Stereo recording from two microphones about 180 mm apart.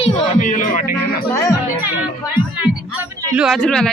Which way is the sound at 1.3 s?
20° left (ahead or behind).